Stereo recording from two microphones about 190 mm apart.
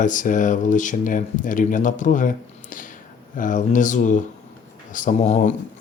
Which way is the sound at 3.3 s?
45° left (ahead or behind).